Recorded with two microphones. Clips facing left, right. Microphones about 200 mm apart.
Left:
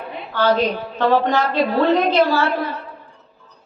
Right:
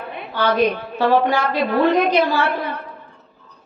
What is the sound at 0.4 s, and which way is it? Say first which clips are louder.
Speech: even; 60° right (ahead or behind).